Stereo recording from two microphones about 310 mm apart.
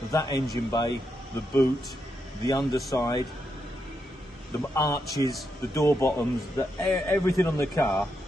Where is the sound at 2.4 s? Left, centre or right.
Centre.